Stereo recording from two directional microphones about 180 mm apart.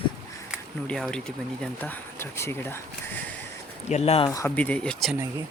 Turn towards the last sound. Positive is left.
turn(degrees=5)  # may be behind; listen again after turning